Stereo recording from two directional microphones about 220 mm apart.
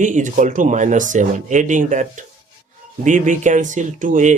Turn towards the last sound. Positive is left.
turn(degrees=-35)  # may be behind; listen again after turning